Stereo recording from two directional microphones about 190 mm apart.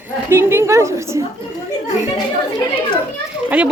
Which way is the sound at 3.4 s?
5° right (ahead or behind).